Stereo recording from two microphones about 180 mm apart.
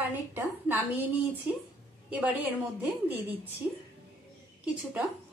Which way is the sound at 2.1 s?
10° right (ahead or behind).